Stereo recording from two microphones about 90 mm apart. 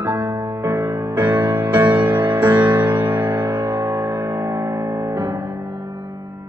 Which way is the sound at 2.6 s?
50° right (ahead or behind).